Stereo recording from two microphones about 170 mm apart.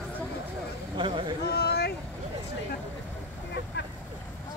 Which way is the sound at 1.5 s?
70° left (ahead or behind).